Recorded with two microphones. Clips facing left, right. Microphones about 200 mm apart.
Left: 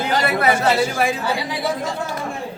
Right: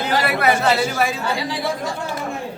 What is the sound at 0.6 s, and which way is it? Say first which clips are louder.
Speech: left 1 dB; 10° left (ahead or behind).